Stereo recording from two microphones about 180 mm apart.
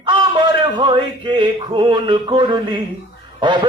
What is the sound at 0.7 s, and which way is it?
Mantra, 25° right (ahead or behind).